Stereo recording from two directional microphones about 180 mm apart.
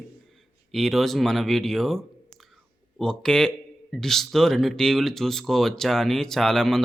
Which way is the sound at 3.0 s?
5° left (ahead or behind).